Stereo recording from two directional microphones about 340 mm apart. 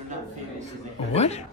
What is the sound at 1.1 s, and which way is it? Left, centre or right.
Speech, centre.